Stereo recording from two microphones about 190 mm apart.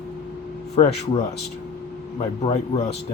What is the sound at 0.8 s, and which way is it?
Speech, 30° left (ahead or behind).